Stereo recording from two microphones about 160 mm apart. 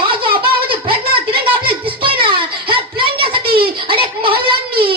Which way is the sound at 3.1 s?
70° right (ahead or behind).